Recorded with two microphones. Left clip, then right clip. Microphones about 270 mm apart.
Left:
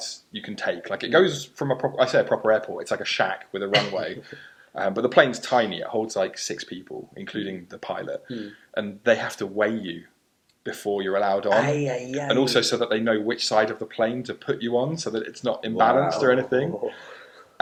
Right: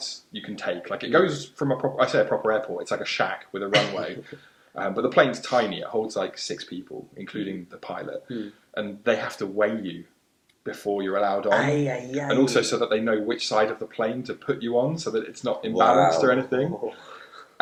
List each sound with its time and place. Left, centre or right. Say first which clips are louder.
0.5 s speech: left 2 dB; left
4.7 s speech: left 2 dB; left
11.4 s speech: left 1 dB; centre
12.3 s speech: left 1 dB; left